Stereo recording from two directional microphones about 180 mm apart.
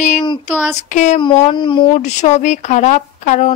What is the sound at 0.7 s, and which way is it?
Child singing, 40° left (ahead or behind).